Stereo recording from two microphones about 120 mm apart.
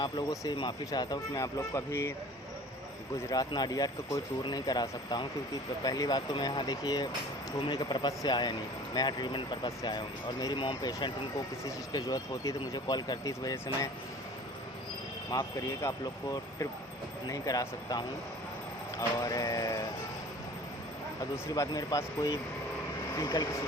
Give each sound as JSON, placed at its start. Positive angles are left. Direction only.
{"t": 0.0, "sound": "speech", "side_deg": 35}
{"t": 3.2, "sound": "speech", "side_deg": 35}
{"t": 15.3, "sound": "speech", "side_deg": 35}
{"t": 21.3, "sound": "speech", "side_deg": 25}